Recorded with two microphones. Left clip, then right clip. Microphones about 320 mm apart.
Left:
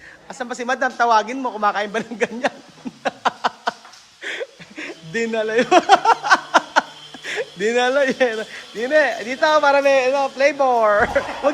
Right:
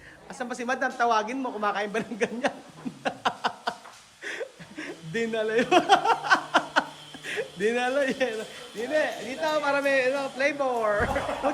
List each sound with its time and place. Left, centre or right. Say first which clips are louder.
0.3 s a man's voice: left 7 dB; centre
3.0 s a sound: left 7 dB; centre
7.3 s a man's voice: left 6 dB; centre